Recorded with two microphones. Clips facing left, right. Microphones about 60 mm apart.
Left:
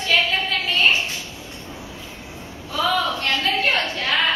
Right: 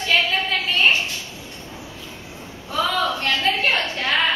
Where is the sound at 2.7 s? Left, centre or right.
Right.